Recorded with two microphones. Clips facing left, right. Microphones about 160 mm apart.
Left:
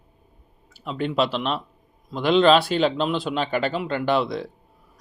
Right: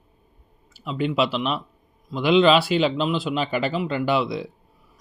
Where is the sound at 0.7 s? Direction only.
Centre (ahead or behind).